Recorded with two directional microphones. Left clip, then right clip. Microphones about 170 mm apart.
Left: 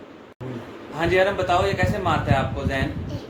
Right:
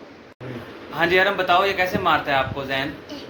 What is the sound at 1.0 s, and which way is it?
A man's voice, 15° right (ahead or behind).